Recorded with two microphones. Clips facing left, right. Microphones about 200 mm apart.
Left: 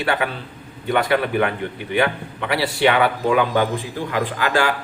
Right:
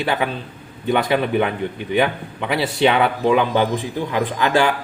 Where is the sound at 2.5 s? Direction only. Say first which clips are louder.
Right 1 dB; 20° right (ahead or behind).